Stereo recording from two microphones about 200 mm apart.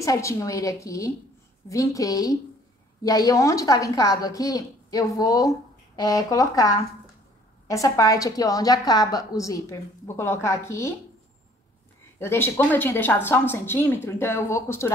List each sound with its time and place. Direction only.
0.0 s a woman's voice: 15° left (ahead or behind)
12.2 s a woman's voice: 10° left (ahead or behind)